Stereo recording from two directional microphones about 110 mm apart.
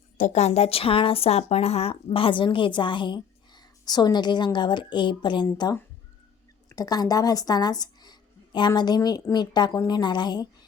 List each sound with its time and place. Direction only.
0.3 s a woman's voice: 75° left (ahead or behind); by 10.5 s 40° left (ahead or behind)